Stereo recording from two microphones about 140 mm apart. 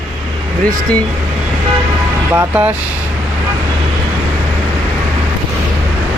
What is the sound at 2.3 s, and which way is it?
Speech, 15° right (ahead or behind).